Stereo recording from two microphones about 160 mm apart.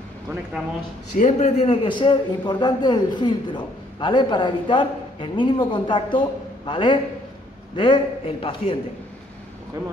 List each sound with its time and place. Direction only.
1.1 s a man's voice: 50° left (ahead or behind)
9.8 s speech: 20° right (ahead or behind)